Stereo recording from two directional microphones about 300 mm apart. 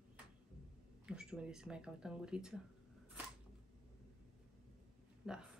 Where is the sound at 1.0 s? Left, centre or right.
Centre.